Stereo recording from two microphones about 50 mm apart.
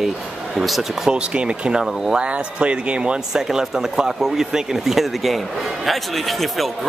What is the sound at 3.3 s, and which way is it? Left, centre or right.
A man's voice, centre.